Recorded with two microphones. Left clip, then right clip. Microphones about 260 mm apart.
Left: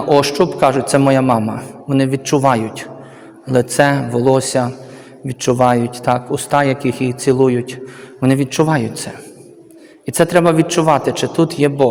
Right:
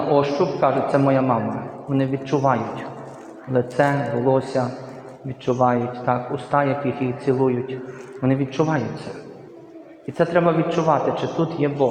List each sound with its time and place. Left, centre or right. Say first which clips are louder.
0.1 s a man's voice: left 7 dB; left
10.1 s a man's voice: left 6 dB; left